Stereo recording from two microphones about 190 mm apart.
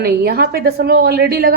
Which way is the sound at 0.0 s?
55° right (ahead or behind).